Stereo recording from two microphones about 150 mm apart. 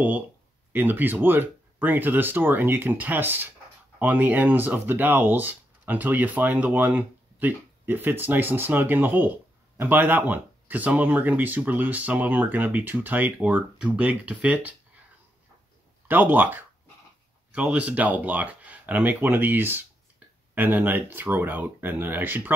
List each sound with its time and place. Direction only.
0.7 s speech: 10° right (ahead or behind)
16.1 s speech: 10° right (ahead or behind)